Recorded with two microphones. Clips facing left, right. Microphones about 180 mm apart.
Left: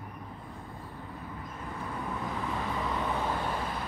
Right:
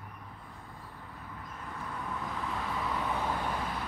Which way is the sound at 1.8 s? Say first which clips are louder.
Left 3 dB; 10° left (ahead or behind).